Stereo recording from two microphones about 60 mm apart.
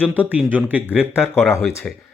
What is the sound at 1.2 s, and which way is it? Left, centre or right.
Speech, centre.